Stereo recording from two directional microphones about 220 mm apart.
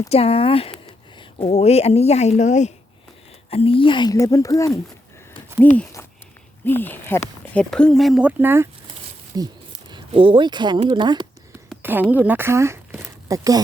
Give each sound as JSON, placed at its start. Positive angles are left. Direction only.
{"t": 0.1, "sound": "speech", "side_deg": 25}
{"t": 11.7, "sound": "a sound", "side_deg": -10}
{"t": 12.1, "sound": "speech", "side_deg": -10}